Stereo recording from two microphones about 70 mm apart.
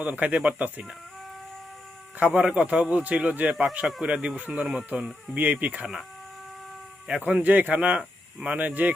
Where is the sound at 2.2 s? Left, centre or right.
Centre.